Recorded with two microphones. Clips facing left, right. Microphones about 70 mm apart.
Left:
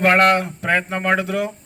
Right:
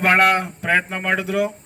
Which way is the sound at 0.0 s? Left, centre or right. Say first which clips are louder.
Left 1 dB; centre.